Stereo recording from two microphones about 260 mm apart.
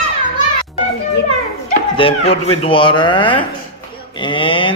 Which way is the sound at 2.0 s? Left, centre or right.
Left.